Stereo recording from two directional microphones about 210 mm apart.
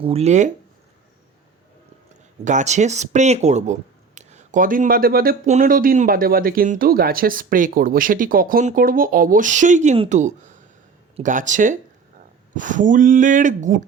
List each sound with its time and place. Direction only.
0.0 s speech: 30° right (ahead or behind)
2.4 s speech: 35° right (ahead or behind)